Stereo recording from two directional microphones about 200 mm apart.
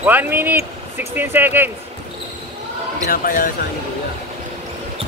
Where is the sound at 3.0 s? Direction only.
45° left (ahead or behind).